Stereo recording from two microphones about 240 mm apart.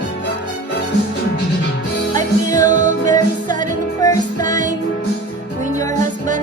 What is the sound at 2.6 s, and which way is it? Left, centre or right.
Music, right.